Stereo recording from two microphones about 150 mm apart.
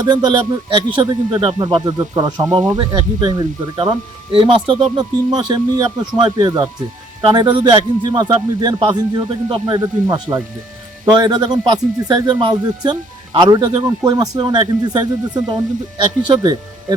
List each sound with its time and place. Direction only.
0.0 s a man's voice: 30° right (ahead or behind)